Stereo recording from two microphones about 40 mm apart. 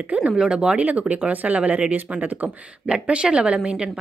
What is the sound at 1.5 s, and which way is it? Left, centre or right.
Speech, right.